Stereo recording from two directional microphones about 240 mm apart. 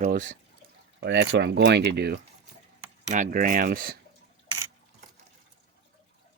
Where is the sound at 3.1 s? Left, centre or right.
Right.